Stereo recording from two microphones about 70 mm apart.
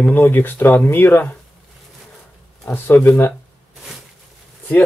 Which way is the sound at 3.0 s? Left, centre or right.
Left.